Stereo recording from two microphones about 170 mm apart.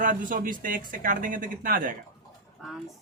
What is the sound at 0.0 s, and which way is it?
Speech, 50° right (ahead or behind).